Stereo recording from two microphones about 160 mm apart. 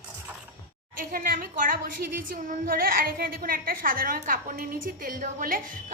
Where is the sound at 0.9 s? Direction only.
60° right (ahead or behind).